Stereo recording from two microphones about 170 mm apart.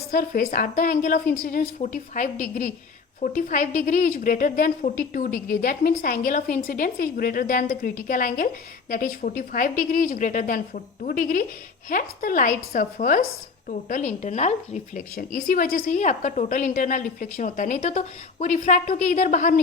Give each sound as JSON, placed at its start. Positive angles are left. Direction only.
{"t": 0.1, "sound": "a woman's voice", "side_deg": 55}
{"t": 15.1, "sound": "a woman's voice", "side_deg": 55}